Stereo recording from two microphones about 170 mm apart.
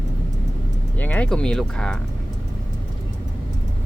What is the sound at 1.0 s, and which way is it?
Speech, 10° left (ahead or behind).